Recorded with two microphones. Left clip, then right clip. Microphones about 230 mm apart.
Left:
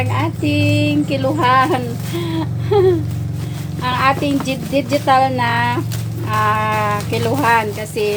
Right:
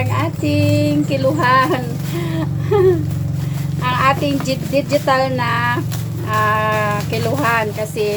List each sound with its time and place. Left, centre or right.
0.1 s speech: left
3.8 s speech: left